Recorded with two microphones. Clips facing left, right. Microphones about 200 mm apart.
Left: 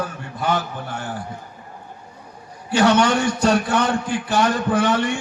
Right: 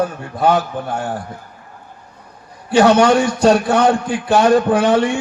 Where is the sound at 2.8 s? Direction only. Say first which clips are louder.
Right 5 dB; 60° right (ahead or behind).